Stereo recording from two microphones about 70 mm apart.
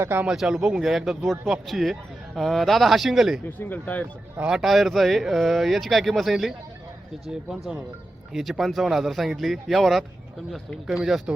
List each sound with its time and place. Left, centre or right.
0.0 s speech: right
0.3 s speech: centre
3.4 s speech: left
4.4 s speech: centre
8.3 s speech: centre